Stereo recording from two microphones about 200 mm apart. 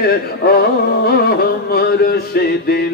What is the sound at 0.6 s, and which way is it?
Music, 50° left (ahead or behind).